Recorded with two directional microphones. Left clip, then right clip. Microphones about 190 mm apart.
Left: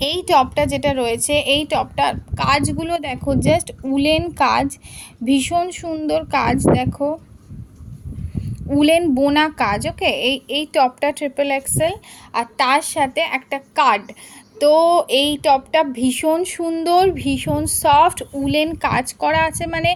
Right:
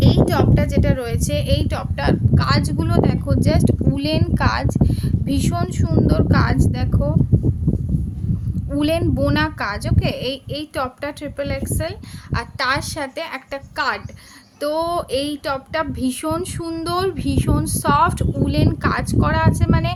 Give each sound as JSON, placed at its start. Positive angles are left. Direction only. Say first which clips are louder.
{"t": 0.0, "sound": "a woman's voice", "louder": "left 3 dB", "side_deg": 25}
{"t": 8.7, "sound": "a woman's voice", "louder": "left 5 dB", "side_deg": 15}
{"t": 9.9, "sound": "speech", "louder": "left 6 dB", "side_deg": -25}
{"t": 10.2, "sound": "a woman's voice", "louder": "left 6 dB", "side_deg": 15}
{"t": 14.9, "sound": "speech", "louder": "left 6 dB", "side_deg": -20}
{"t": 15.8, "sound": "a woman's voice", "louder": "left 5 dB", "side_deg": 10}
{"t": 18.6, "sound": "speech", "louder": "left 2 dB", "side_deg": -30}
{"t": 18.9, "sound": "a woman's voice", "louder": "left 3 dB", "side_deg": 10}